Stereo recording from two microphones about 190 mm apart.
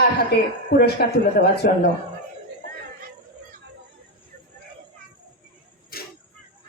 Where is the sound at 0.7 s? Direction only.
55° left (ahead or behind).